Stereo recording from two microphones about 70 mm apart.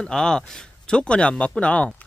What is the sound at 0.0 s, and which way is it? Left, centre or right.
Speech, centre.